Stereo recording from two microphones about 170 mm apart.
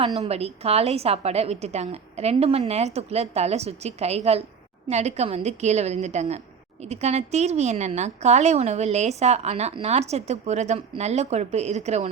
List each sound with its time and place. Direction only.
0.2 s a woman's voice: 40° right (ahead or behind)